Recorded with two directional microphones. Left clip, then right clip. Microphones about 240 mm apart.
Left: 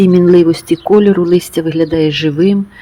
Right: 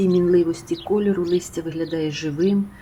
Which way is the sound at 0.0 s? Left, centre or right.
Left.